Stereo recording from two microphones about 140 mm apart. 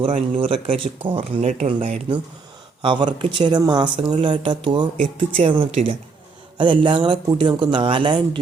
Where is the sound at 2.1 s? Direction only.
35° right (ahead or behind).